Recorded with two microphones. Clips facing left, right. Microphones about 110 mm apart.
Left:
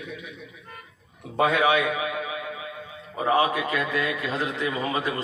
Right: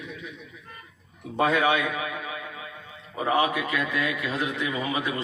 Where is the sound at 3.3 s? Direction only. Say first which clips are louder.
Left 1 dB; 35° left (ahead or behind).